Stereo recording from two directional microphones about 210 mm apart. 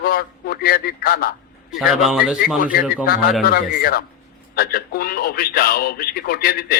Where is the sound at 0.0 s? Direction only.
45° left (ahead or behind).